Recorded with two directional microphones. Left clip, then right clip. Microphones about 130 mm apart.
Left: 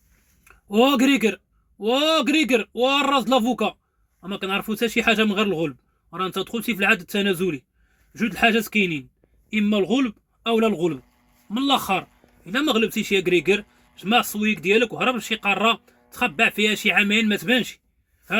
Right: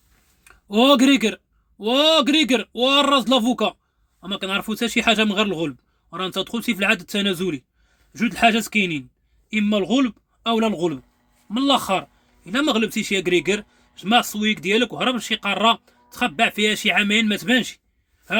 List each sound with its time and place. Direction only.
0.4 s speech: 30° right (ahead or behind)